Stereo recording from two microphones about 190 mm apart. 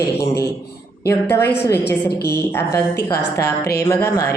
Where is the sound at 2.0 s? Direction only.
55° left (ahead or behind).